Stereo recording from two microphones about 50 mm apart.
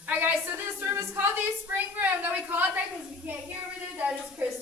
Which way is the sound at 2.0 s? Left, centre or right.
Right.